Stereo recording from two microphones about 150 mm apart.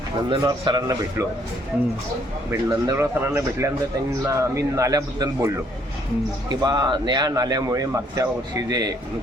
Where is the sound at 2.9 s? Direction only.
20° right (ahead or behind).